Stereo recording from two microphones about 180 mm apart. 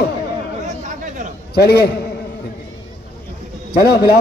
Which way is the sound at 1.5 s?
65° left (ahead or behind).